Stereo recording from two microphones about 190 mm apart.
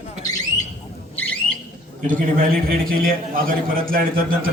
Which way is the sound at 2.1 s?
50° right (ahead or behind).